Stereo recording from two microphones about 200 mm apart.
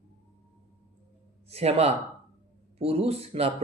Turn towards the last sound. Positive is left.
turn(degrees=-30)  # may be behind; listen again after turning